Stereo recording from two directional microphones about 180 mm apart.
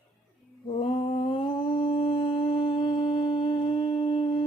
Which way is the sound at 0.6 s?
35° left (ahead or behind).